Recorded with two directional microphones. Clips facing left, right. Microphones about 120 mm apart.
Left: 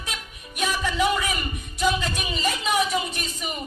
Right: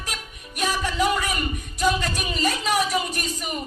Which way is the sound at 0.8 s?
Centre (ahead or behind).